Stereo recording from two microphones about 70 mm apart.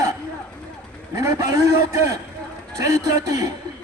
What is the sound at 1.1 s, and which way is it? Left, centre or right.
A man's voice, right.